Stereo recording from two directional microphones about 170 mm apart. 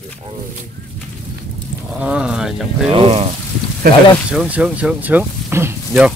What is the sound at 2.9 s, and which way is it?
Speech, 35° right (ahead or behind).